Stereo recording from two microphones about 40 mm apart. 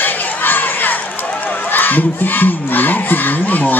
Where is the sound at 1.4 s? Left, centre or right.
Left.